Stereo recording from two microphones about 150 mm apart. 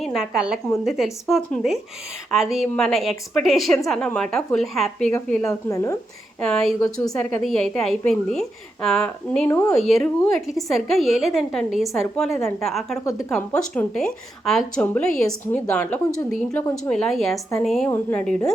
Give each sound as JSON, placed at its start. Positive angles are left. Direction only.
{"t": 0.0, "sound": "a woman's voice", "side_deg": 0}
{"t": 5.6, "sound": "a woman's voice", "side_deg": 20}
{"t": 6.4, "sound": "a woman's voice", "side_deg": 5}
{"t": 9.5, "sound": "a woman's voice", "side_deg": 15}
{"t": 9.8, "sound": "a woman's voice", "side_deg": 0}
{"t": 13.1, "sound": "a woman's voice", "side_deg": 20}
{"t": 13.3, "sound": "a woman's voice", "side_deg": 5}
{"t": 17.8, "sound": "a woman's voice", "side_deg": 10}